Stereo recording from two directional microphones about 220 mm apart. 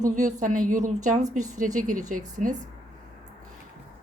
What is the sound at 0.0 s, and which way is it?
A woman's voice, 35° right (ahead or behind).